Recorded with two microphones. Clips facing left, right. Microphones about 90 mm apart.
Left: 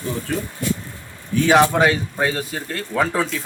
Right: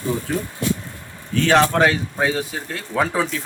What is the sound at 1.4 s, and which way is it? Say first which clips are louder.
Speech: left 1 dB; 10° left (ahead or behind).